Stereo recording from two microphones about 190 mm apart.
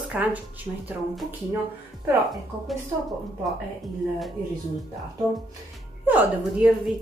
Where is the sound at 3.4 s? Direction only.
Centre (ahead or behind).